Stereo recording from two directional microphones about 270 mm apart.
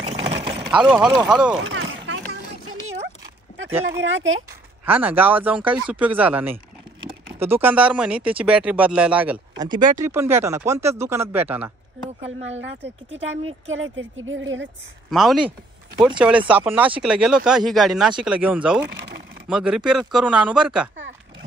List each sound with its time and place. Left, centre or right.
0.1 s vehicle: right
0.8 s speech: centre
1.6 s a sound: right
4.0 s a woman's voice: right
4.8 s speech: centre
12.4 s a woman's voice: right
15.0 s speech: centre